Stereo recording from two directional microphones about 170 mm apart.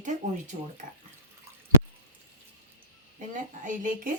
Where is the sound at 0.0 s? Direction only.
45° right (ahead or behind).